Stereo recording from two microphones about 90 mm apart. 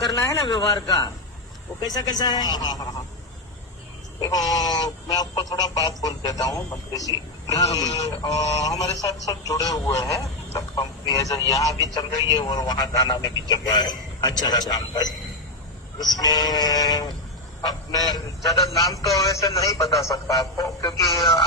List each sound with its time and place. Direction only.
0.2 s a man's voice: 40° left (ahead or behind)
4.2 s a man's voice: 45° left (ahead or behind)
16.1 s a man's voice: 45° left (ahead or behind)